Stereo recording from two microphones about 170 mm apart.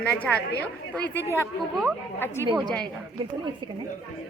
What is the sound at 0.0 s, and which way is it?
Speech, 10° left (ahead or behind).